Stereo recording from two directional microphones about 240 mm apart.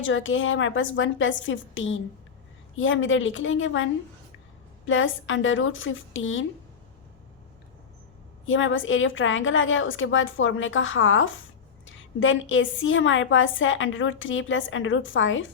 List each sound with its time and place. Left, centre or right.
0.0 s a woman's voice: left
4.9 s a woman's voice: left
8.4 s a woman's voice: left